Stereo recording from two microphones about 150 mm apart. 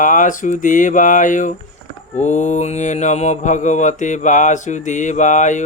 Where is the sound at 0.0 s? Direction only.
60° left (ahead or behind).